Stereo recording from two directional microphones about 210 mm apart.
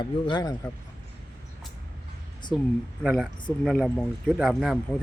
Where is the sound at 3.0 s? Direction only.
Centre (ahead or behind).